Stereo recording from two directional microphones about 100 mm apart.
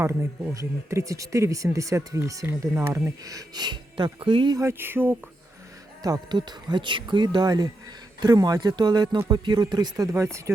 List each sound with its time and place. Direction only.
0.0 s speech: 25° right (ahead or behind); by 4.5 s 60° right (ahead or behind)
4.5 s speech: 25° right (ahead or behind)
6.0 s speech: 45° right (ahead or behind)